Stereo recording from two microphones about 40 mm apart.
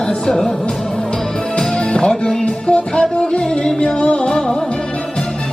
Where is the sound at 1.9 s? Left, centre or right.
Left.